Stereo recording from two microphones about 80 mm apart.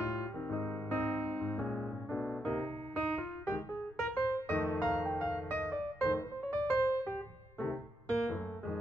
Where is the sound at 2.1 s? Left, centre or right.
Centre.